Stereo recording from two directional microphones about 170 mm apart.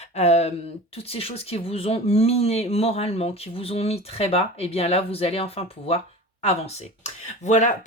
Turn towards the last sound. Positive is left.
turn(degrees=45)  # may be behind; listen again after turning